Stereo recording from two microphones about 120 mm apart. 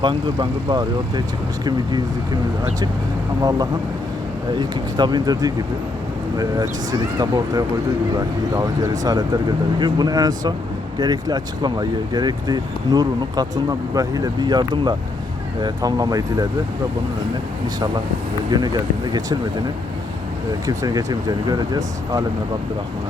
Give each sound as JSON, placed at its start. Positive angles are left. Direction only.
{"t": 0.0, "sound": "speech", "side_deg": -40}
{"t": 4.5, "sound": "speech", "side_deg": -40}
{"t": 18.5, "sound": "speech", "side_deg": -35}
{"t": 20.7, "sound": "speech", "side_deg": -30}